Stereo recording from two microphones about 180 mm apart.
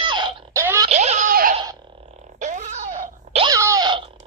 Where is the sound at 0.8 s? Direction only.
35° right (ahead or behind).